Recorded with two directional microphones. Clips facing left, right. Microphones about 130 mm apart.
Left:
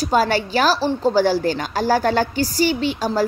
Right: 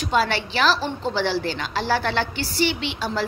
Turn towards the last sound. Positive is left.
turn(degrees=40)  # may be behind; listen again after turning